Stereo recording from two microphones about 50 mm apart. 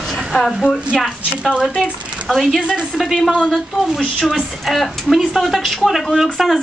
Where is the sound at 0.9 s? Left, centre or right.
Centre.